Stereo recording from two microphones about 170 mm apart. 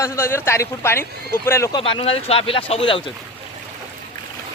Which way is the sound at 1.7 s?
30° left (ahead or behind).